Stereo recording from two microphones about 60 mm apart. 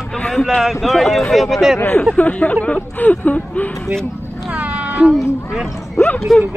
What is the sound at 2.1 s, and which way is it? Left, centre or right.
Speech, left.